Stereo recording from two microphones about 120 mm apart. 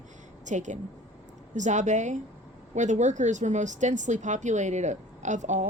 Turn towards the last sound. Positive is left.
turn(degrees=-90)